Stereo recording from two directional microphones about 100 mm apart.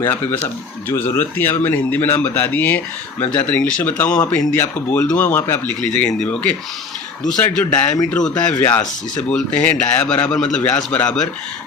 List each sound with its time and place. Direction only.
0.0 s speech: 25° left (ahead or behind)
4.5 s a man's voice: 25° left (ahead or behind)